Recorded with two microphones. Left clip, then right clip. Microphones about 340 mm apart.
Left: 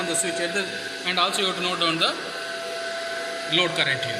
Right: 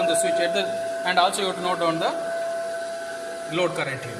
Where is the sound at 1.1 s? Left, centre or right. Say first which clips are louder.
Right 1 dB; right.